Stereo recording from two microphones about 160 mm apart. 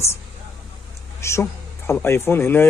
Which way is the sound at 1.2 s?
15° left (ahead or behind).